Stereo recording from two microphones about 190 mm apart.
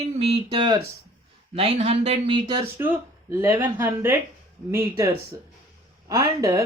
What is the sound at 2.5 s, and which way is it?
Speech, 15° right (ahead or behind).